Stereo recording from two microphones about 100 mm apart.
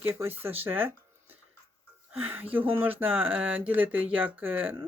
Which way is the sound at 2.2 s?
20° right (ahead or behind).